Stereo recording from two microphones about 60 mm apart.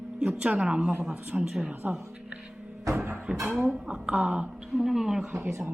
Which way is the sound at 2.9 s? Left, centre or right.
Right.